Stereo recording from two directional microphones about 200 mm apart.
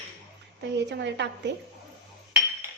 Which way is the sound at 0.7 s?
60° right (ahead or behind).